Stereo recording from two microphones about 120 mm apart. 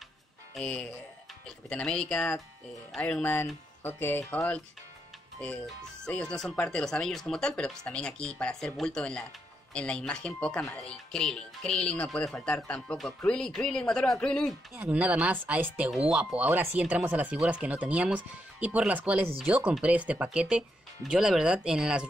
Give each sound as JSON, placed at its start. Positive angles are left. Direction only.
{"t": 0.6, "sound": "speech", "side_deg": 10}
{"t": 6.0, "sound": "speech", "side_deg": 5}
{"t": 14.8, "sound": "speech", "side_deg": -10}